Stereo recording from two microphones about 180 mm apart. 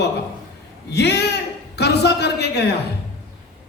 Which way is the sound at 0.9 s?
65° left (ahead or behind).